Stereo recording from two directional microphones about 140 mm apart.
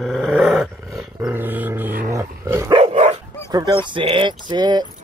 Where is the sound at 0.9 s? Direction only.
20° right (ahead or behind).